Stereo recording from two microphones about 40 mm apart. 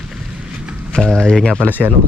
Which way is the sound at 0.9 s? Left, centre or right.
Centre.